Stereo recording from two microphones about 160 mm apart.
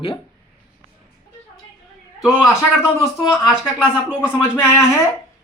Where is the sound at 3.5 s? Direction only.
5° right (ahead or behind).